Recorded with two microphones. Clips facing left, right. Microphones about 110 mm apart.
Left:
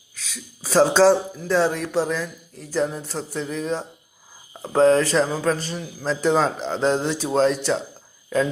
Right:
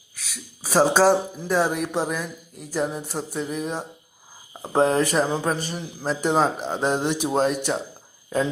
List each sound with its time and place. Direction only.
0.6 s speech: 10° right (ahead or behind)